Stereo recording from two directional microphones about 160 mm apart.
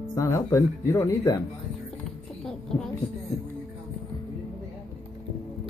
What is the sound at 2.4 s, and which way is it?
Heart sounds, 5° left (ahead or behind).